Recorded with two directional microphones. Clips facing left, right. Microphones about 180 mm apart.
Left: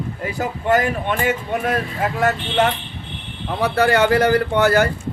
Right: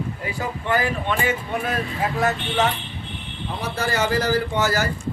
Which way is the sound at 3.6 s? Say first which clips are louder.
Left 8 dB; 65° left (ahead or behind).